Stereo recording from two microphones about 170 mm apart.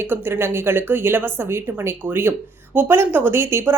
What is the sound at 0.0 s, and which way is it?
Speech, 10° right (ahead or behind).